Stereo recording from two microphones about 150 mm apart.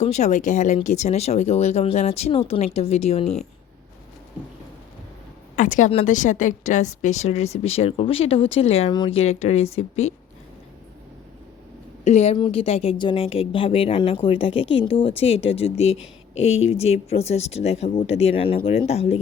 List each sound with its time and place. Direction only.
0.0 s a woman's voice: 50° left (ahead or behind)
5.5 s a woman's voice: 60° left (ahead or behind); by 8.9 s 40° left (ahead or behind)
8.9 s speech: 30° left (ahead or behind)
9.1 s a woman's voice: 45° left (ahead or behind)
12.0 s a woman's voice: 50° left (ahead or behind)